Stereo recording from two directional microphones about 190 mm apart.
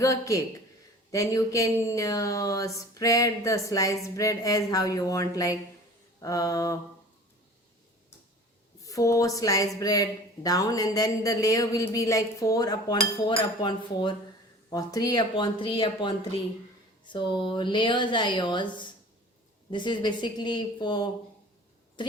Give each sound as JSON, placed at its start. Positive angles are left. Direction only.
{"t": 0.0, "sound": "speech", "side_deg": 15}
{"t": 8.8, "sound": "speech", "side_deg": 15}